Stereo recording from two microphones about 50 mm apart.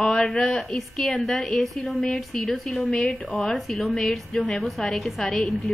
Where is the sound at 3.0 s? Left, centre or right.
Left.